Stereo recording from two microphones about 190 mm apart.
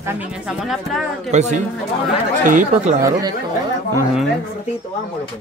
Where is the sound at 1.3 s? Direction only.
40° right (ahead or behind).